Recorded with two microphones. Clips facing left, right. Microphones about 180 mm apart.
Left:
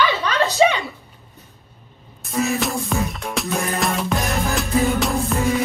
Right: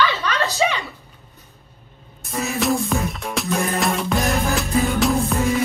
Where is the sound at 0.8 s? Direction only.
Centre (ahead or behind).